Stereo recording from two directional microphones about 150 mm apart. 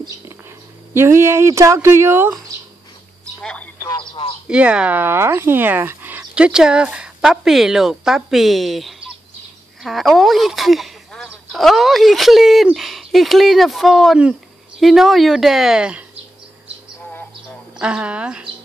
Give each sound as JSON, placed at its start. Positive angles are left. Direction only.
{"t": 0.9, "sound": "speech", "side_deg": -15}
{"t": 3.8, "sound": "a sound", "side_deg": 30}
{"t": 4.5, "sound": "speech", "side_deg": -5}
{"t": 17.7, "sound": "speech", "side_deg": -5}